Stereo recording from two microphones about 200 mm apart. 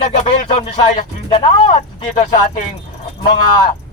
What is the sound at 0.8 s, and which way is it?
Speech, 25° left (ahead or behind).